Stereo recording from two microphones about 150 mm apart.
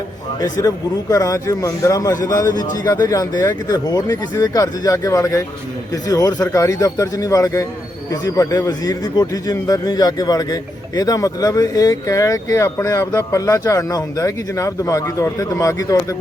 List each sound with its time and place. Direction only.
0.3 s a man's voice: 25° left (ahead or behind)